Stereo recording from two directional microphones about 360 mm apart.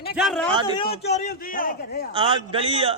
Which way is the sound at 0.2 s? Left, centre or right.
Centre.